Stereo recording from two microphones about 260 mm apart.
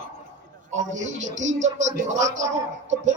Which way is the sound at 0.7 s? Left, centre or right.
Right.